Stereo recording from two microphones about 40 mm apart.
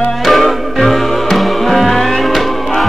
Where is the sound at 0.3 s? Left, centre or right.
Centre.